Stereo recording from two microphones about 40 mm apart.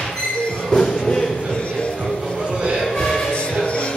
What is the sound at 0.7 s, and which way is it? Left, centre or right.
Music, centre.